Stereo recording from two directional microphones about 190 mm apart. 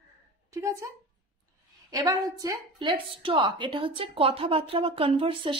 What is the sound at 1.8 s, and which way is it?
A woman's voice, 20° right (ahead or behind).